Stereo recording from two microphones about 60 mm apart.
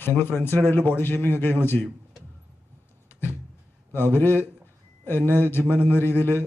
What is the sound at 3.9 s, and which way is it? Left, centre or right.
A man's voice, left.